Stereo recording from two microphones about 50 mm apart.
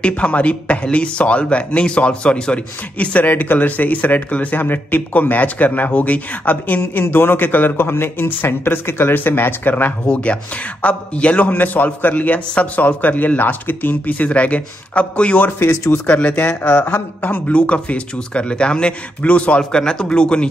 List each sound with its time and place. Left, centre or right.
0.1 s a man's voice: left
10.1 s a man's voice: left
19.6 s speech: centre